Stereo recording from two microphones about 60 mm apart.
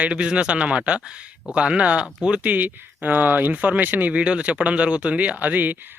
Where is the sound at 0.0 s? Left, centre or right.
Centre.